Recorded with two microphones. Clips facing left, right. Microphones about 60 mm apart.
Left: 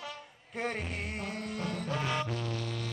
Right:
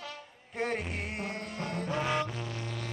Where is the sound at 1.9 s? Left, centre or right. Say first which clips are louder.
Right 3 dB; centre.